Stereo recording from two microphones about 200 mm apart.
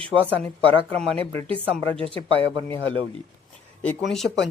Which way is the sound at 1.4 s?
25° right (ahead or behind).